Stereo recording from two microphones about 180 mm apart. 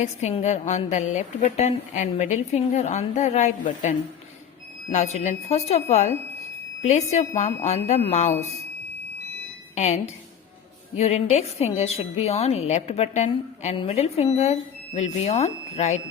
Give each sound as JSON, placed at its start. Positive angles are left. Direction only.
{"t": 0.0, "sound": "a woman's voice", "side_deg": 40}
{"t": 9.7, "sound": "a woman's voice", "side_deg": 40}